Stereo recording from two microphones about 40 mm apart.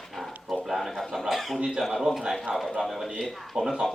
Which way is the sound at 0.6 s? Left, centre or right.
Centre.